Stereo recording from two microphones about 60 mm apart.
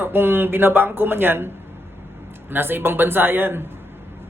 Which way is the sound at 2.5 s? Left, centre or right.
Right.